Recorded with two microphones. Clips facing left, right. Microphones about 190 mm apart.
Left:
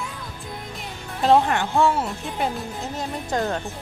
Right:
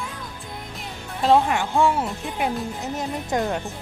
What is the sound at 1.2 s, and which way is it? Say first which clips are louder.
Speech: even; centre (ahead or behind).